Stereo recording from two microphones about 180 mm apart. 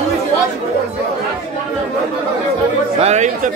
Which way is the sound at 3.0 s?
40° right (ahead or behind).